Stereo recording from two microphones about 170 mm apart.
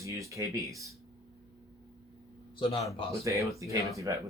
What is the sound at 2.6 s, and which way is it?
Speech, 35° left (ahead or behind).